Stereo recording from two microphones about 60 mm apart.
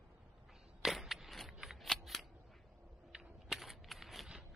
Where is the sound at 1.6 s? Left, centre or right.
Centre.